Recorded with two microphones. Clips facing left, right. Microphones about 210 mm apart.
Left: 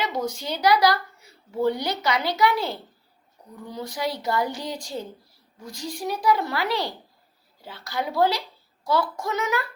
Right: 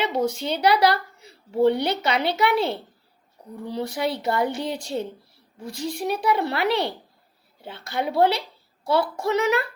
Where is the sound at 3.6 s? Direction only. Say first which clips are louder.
Right 3 dB; 30° right (ahead or behind).